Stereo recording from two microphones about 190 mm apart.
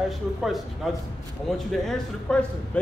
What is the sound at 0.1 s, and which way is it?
A man's voice, centre (ahead or behind).